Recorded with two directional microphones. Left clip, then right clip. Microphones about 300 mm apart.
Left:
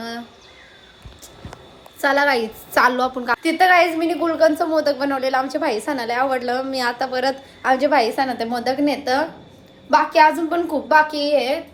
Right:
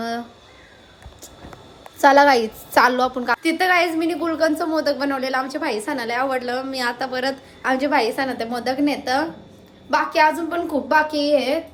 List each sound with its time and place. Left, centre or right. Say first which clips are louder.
2.0 s a woman's voice: right 4 dB; centre